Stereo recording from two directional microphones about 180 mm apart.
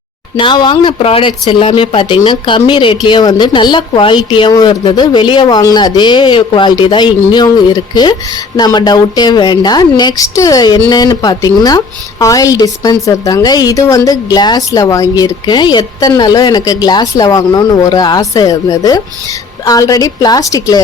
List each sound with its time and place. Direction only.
0.3 s speech: 25° left (ahead or behind)